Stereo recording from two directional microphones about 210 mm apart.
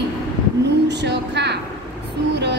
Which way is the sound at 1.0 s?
55° right (ahead or behind).